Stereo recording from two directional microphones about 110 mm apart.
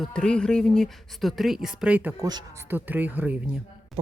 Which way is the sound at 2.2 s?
40° right (ahead or behind).